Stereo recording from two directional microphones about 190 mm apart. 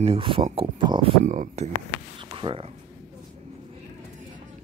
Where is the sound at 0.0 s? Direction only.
30° right (ahead or behind).